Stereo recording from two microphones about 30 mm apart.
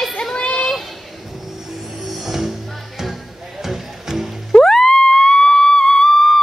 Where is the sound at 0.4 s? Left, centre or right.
Left.